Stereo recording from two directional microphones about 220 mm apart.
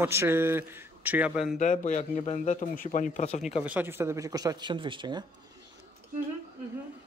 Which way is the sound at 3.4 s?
5° right (ahead or behind).